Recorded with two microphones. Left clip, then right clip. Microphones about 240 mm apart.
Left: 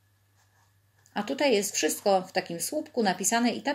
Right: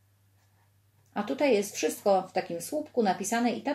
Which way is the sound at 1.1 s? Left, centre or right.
Left.